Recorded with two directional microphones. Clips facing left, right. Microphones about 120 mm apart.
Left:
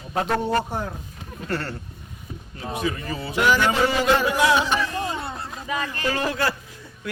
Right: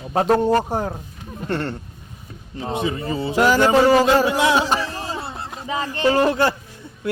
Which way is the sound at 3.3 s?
40° right (ahead or behind).